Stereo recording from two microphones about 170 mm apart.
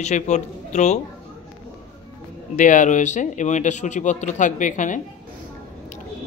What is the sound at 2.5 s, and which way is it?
Speech, 50° left (ahead or behind).